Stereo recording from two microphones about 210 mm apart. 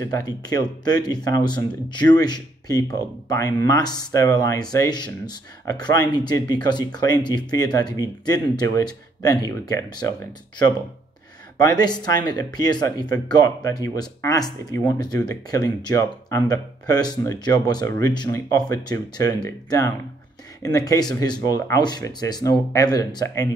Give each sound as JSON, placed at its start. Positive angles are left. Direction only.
{"t": 0.0, "sound": "speech", "side_deg": 20}
{"t": 11.6, "sound": "speech", "side_deg": 20}